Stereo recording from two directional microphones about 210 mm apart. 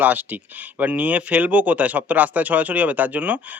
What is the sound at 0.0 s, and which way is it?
Speech, 10° right (ahead or behind).